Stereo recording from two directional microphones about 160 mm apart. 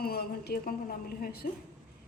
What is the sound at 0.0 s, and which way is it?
A woman's voice, 75° left (ahead or behind).